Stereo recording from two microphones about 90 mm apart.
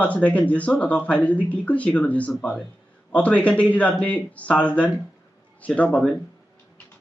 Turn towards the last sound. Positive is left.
turn(degrees=15)  # may be behind; listen again after turning